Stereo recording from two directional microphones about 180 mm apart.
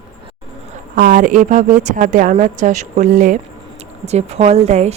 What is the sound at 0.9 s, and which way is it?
A woman's voice, 50° right (ahead or behind).